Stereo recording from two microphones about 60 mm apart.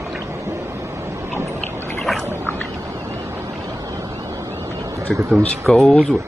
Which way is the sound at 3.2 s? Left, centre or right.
Right.